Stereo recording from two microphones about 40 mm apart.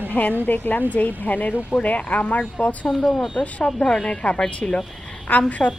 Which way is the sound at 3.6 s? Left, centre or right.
Centre.